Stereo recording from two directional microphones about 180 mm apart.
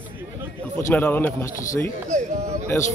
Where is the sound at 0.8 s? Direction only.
15° left (ahead or behind).